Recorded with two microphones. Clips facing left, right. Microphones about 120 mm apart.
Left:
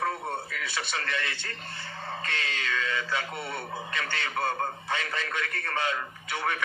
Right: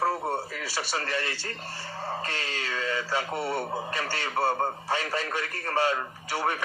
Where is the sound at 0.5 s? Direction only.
35° right (ahead or behind).